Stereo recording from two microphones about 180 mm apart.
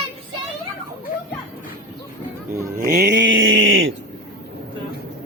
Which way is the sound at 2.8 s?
60° right (ahead or behind).